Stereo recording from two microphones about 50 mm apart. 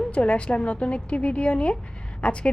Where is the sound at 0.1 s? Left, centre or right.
Left.